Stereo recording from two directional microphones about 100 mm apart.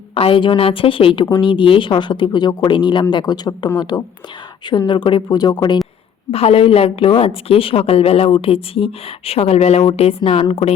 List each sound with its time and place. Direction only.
0.1 s a woman's voice: 70° left (ahead or behind); by 5.8 s 45° left (ahead or behind)
6.3 s a woman's voice: 75° left (ahead or behind)
8.3 s speech: 70° left (ahead or behind)